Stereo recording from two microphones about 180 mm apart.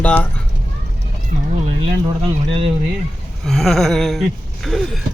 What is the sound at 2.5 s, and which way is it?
Speech, 30° right (ahead or behind).